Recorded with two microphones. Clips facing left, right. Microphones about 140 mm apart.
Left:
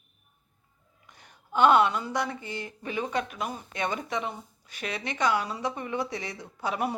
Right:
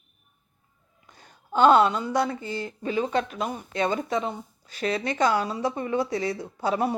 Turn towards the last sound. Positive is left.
turn(degrees=-30)  # may be behind; listen again after turning